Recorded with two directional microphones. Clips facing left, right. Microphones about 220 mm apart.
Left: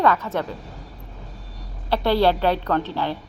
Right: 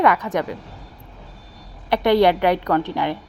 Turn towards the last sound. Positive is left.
turn(degrees=-15)  # may be behind; listen again after turning